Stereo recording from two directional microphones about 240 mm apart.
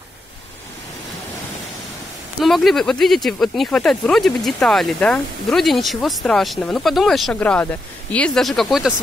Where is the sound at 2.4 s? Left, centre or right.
Centre.